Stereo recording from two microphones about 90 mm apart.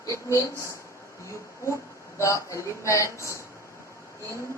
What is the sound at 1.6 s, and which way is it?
Speech, 35° left (ahead or behind).